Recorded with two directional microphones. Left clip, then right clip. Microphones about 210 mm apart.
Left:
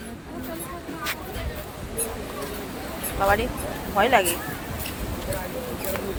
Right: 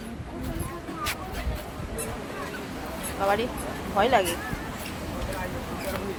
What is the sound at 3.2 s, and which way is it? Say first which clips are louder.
Speech: left 3 dB; 15° left (ahead or behind).